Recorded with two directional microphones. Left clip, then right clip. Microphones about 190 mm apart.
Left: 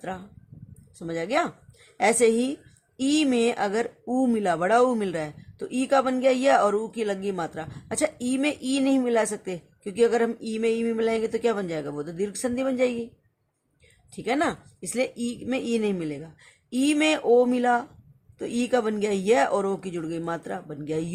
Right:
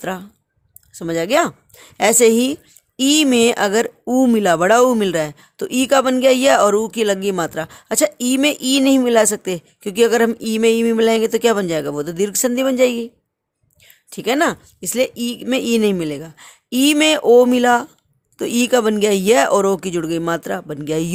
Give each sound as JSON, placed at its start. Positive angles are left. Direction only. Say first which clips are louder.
{"t": 0.0, "sound": "speech", "louder": "right 9 dB", "side_deg": -55}
{"t": 14.1, "sound": "speech", "louder": "right 8 dB", "side_deg": -55}